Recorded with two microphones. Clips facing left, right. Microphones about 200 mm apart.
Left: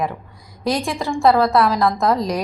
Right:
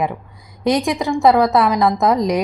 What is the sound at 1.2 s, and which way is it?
A woman's voice, 20° right (ahead or behind).